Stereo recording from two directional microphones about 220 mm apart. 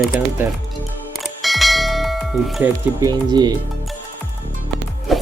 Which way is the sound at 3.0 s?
20° right (ahead or behind).